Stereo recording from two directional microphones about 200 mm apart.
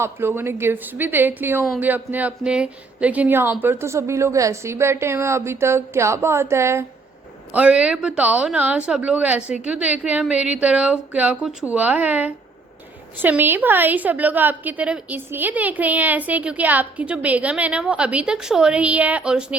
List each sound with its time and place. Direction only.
0.0 s a woman's voice: 10° right (ahead or behind)